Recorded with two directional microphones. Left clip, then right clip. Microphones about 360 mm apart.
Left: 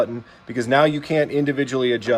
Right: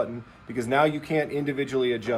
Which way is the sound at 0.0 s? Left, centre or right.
Left.